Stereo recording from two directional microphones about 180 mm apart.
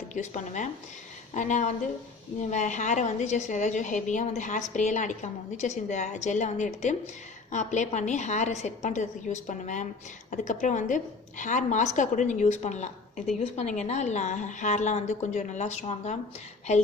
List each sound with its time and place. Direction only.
0.1 s a woman's voice: 40° left (ahead or behind)